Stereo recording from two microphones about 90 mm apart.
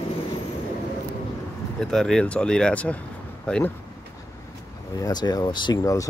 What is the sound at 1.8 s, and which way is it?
Speech, 5° left (ahead or behind).